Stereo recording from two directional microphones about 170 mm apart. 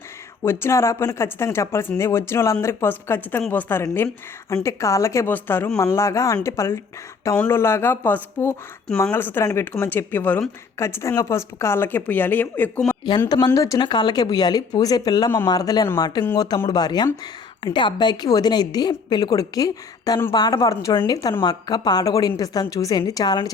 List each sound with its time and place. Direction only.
0.4 s a woman's voice: 15° left (ahead or behind)
13.1 s a woman's voice: 25° left (ahead or behind)